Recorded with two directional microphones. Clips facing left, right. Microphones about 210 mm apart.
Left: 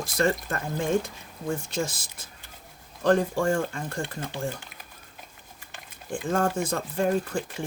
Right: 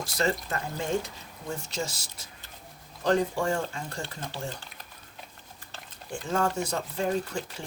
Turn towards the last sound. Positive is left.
turn(degrees=50)  # may be behind; listen again after turning